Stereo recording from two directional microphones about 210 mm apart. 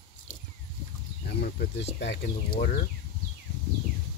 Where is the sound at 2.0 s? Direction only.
50° left (ahead or behind).